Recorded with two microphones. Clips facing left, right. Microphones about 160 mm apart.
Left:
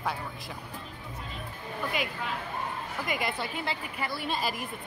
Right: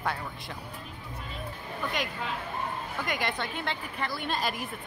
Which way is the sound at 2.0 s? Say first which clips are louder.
Even; 5° left (ahead or behind).